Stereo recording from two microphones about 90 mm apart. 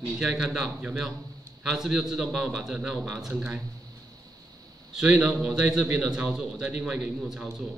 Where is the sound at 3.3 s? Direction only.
10° right (ahead or behind).